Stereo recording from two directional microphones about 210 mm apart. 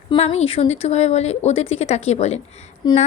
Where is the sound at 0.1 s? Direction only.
30° left (ahead or behind).